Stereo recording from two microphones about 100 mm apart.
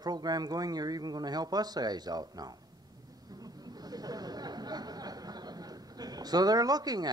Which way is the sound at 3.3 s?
40° right (ahead or behind).